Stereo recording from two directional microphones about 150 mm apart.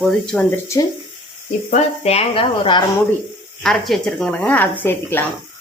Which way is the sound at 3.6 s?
Centre (ahead or behind).